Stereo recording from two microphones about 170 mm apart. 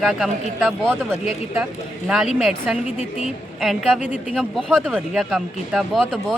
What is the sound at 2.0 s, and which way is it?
Speech, 5° right (ahead or behind).